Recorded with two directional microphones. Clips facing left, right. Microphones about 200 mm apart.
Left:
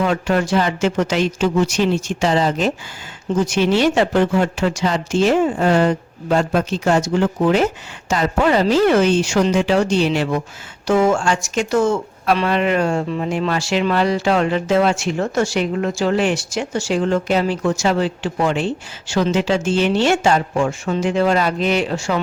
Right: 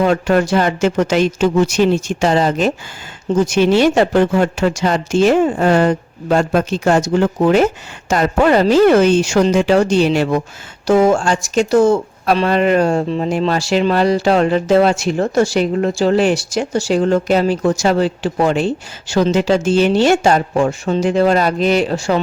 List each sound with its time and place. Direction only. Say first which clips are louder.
0.0 s speech: right 4 dB; 50° right (ahead or behind)